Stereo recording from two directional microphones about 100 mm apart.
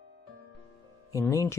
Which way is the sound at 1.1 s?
35° left (ahead or behind).